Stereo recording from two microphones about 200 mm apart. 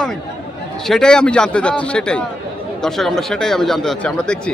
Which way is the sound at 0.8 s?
5° left (ahead or behind).